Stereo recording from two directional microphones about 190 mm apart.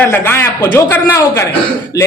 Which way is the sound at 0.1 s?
10° left (ahead or behind).